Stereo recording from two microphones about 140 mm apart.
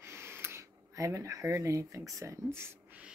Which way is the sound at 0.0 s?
15° right (ahead or behind).